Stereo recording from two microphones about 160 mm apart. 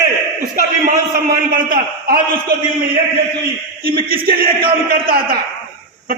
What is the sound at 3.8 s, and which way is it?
A man's voice, 65° right (ahead or behind).